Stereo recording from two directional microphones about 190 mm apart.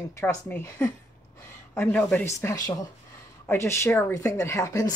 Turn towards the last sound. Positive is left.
turn(degrees=15)  # may be behind; listen again after turning